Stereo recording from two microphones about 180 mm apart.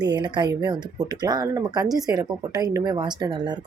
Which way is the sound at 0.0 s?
25° right (ahead or behind).